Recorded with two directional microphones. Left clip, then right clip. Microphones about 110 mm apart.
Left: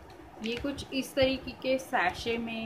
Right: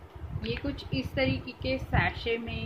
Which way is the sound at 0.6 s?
20° left (ahead or behind).